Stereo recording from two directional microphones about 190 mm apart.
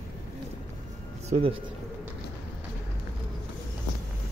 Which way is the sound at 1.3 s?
30° right (ahead or behind).